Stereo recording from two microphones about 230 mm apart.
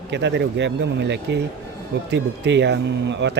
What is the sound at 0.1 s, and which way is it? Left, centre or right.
Speech, right.